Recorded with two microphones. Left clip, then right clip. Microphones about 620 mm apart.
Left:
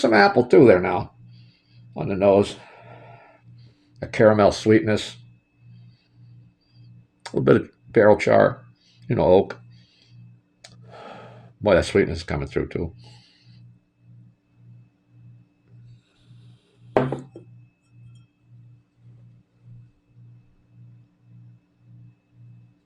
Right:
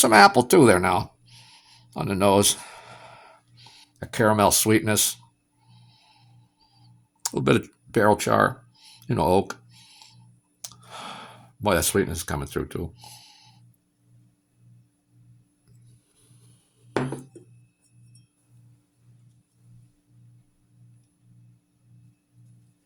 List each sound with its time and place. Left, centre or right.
0.0 s speech: right
4.0 s speech: right
7.2 s speech: right
10.6 s a sound: right